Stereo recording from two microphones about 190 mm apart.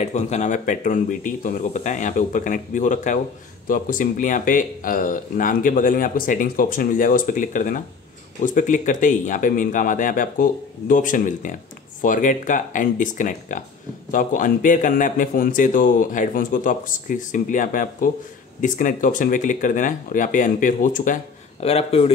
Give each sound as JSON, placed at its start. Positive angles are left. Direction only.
{"t": 0.0, "sound": "speech", "side_deg": 35}